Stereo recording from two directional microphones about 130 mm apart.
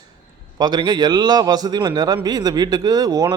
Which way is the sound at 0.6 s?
35° right (ahead or behind).